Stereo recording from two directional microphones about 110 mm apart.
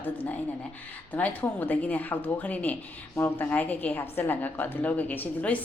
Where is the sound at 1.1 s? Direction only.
15° left (ahead or behind).